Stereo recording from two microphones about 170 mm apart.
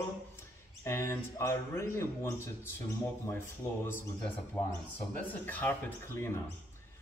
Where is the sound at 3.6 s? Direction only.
15° left (ahead or behind).